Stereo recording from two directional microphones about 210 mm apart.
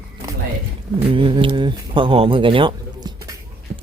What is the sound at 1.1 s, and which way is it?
Speech, 25° right (ahead or behind).